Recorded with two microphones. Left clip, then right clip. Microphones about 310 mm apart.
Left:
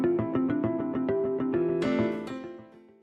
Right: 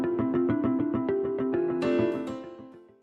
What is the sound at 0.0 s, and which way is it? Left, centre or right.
Music, centre.